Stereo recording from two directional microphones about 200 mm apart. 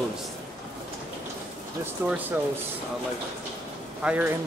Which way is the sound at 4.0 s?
5° right (ahead or behind).